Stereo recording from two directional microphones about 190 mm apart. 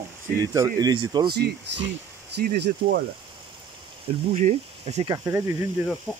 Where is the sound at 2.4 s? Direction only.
60° right (ahead or behind).